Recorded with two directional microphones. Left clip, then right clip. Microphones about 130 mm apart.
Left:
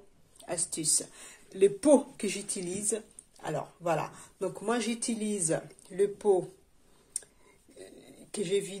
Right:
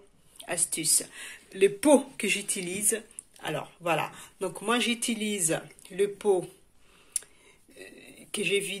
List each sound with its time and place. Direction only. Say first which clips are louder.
0.4 s speech: right 3 dB; 5° left (ahead or behind); by 4.6 s 10° right (ahead or behind)
4.6 s speech: right 6 dB; 5° left (ahead or behind)
6.2 s speech: right 1 dB; 35° right (ahead or behind)
7.7 s a sound: right 3 dB; centre (ahead or behind)